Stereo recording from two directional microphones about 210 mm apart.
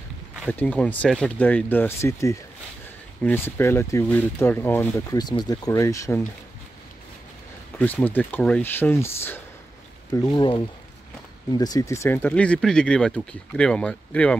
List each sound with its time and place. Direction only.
0.5 s speech: 10° left (ahead or behind)
7.8 s speech: 10° left (ahead or behind)